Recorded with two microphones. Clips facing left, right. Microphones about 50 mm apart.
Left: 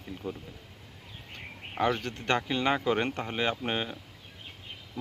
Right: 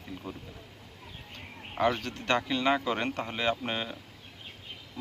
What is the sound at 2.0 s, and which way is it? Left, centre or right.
Speech, left.